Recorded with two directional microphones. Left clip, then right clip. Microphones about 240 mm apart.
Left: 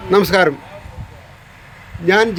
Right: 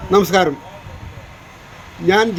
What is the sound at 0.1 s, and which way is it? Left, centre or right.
Speech, centre.